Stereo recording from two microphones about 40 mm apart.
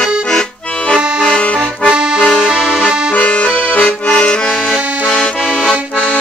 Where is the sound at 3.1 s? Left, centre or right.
Left.